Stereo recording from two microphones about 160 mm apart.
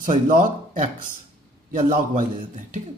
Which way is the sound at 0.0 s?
55° right (ahead or behind).